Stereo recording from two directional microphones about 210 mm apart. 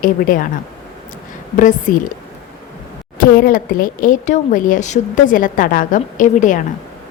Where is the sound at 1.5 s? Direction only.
40° left (ahead or behind).